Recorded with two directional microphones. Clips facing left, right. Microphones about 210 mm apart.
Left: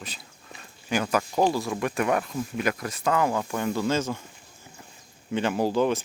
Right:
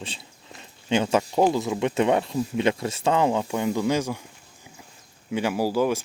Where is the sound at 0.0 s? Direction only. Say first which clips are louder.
Right 4 dB; 25° right (ahead or behind).